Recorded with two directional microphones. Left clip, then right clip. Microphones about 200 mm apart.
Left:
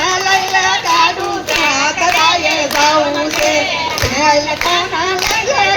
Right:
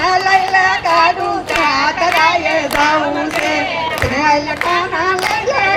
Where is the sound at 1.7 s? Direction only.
40° right (ahead or behind).